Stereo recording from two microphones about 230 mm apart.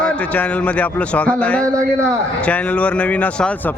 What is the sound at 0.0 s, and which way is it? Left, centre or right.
A man's voice, centre.